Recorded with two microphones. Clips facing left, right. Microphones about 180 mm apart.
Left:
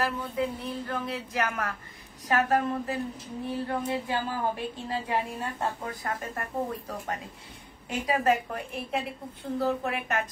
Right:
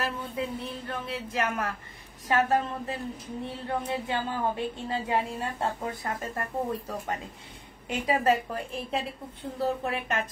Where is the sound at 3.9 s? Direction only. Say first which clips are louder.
Even; 25° right (ahead or behind).